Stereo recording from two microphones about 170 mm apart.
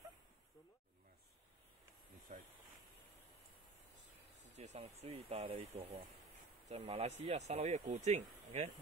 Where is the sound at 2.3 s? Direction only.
50° right (ahead or behind).